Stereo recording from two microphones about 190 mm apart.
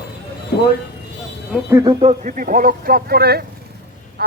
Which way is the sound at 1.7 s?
20° right (ahead or behind).